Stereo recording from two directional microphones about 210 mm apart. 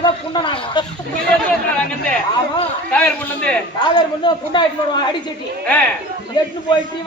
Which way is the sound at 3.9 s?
20° left (ahead or behind).